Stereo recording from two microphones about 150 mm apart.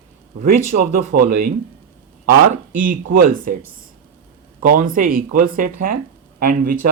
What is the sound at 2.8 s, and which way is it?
Speech, 65° right (ahead or behind).